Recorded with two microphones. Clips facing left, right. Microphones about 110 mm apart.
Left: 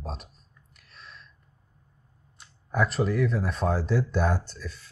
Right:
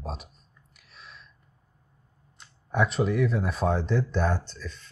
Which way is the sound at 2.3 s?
Centre (ahead or behind).